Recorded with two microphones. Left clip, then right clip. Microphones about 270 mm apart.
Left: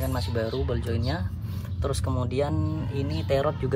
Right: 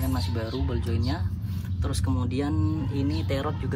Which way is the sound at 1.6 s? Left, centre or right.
Left.